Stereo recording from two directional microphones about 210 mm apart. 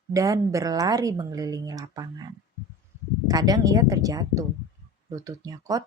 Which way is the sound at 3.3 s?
15° right (ahead or behind).